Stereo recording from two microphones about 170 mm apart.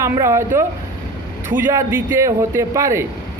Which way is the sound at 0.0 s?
15° right (ahead or behind).